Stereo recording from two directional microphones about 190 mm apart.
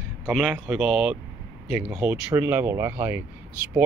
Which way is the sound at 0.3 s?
5° right (ahead or behind).